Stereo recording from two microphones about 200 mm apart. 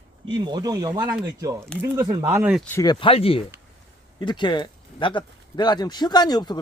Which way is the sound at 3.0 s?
30° left (ahead or behind).